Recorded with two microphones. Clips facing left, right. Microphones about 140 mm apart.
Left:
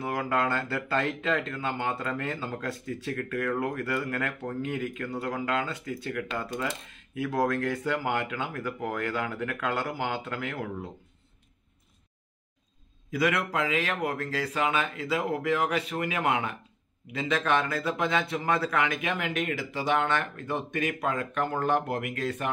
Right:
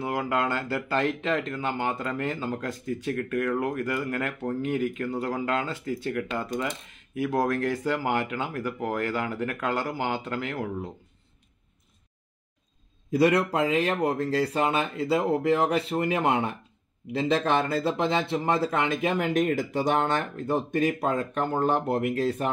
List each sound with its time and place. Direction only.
0.0 s speech: 20° right (ahead or behind)
13.1 s speech: 35° right (ahead or behind)